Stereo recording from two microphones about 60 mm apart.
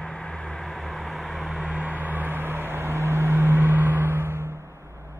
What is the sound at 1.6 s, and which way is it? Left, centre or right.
Vehicle, right.